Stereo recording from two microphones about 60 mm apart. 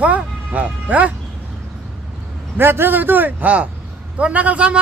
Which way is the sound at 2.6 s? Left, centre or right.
Right.